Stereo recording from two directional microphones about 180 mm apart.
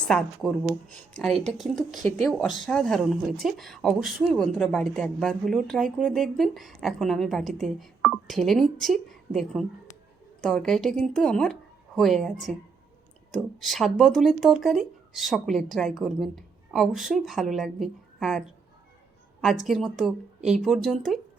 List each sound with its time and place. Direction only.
0.1 s speech: 5° left (ahead or behind)
2.0 s speech: 45° right (ahead or behind)
2.2 s speech: centre (ahead or behind)
13.6 s speech: centre (ahead or behind)